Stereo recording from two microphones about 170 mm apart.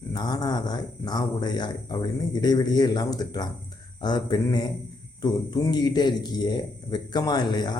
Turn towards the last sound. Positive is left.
turn(degrees=25)  # may be behind; listen again after turning